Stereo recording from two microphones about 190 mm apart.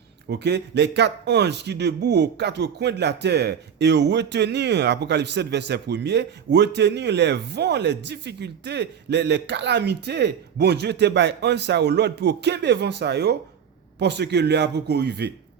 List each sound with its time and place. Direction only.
0.3 s a man's voice: 60° right (ahead or behind)